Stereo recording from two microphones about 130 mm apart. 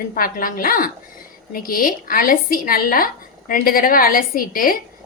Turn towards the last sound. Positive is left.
turn(degrees=90)